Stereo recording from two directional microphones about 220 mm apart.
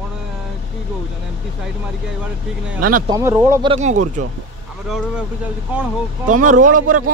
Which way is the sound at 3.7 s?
30° right (ahead or behind).